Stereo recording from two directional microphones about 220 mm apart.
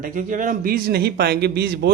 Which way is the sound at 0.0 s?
35° right (ahead or behind).